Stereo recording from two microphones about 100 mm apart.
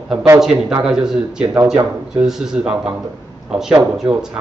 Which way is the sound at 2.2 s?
5° right (ahead or behind).